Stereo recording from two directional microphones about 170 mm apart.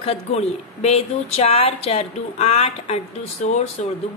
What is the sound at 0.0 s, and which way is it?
Speech, 35° left (ahead or behind).